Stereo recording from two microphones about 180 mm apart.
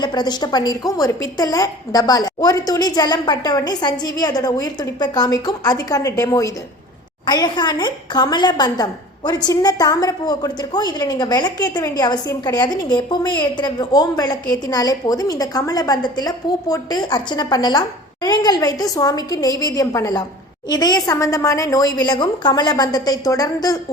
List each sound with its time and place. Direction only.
0.0 s a woman's voice: 25° left (ahead or behind)